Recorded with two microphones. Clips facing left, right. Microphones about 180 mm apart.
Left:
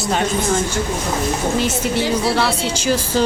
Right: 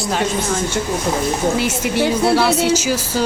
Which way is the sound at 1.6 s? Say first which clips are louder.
Right 1 dB; 10° right (ahead or behind).